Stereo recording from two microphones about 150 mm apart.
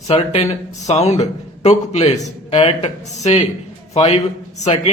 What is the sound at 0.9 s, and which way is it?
A man's voice, 45° left (ahead or behind).